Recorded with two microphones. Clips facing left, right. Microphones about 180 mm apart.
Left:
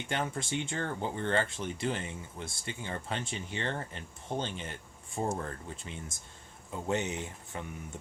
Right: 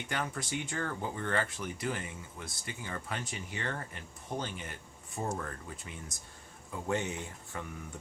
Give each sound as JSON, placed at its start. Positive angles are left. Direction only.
{"t": 0.1, "sound": "speech", "side_deg": 25}